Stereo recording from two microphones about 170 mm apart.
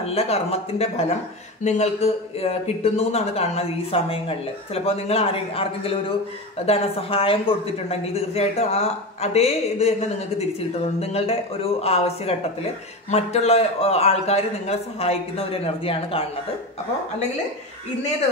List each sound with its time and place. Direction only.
0.0 s speech: 35° left (ahead or behind)